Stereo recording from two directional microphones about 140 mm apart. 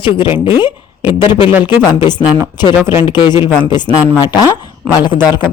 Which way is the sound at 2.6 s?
30° left (ahead or behind).